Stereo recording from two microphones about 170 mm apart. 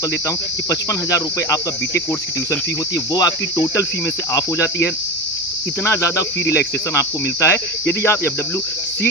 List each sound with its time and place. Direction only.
0.3 s speech: 20° left (ahead or behind)
3.1 s speech: 25° left (ahead or behind)
4.3 s cricket: 20° left (ahead or behind)